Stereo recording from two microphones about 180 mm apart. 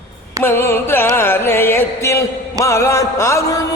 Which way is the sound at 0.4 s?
15° left (ahead or behind).